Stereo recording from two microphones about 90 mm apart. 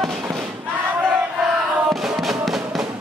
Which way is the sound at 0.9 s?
10° right (ahead or behind).